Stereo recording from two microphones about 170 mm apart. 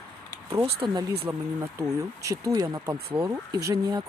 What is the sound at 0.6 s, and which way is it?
Speech, 35° right (ahead or behind).